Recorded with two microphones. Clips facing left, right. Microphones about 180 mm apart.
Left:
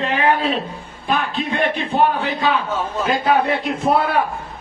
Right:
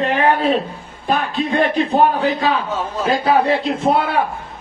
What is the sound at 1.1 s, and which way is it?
A man's voice, 40° right (ahead or behind).